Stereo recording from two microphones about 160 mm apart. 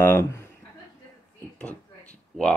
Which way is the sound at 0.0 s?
15° left (ahead or behind).